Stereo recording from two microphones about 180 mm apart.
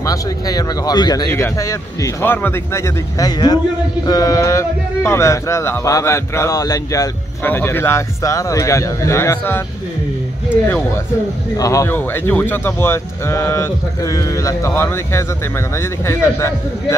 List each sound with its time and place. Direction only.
0.0 s speech: 20° left (ahead or behind)
11.5 s speech: 20° left (ahead or behind)